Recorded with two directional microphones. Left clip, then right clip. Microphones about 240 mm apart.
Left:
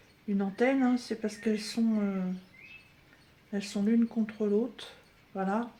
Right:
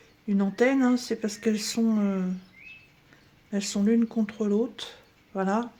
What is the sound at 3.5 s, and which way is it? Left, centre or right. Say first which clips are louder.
Speech: right 5 dB; right.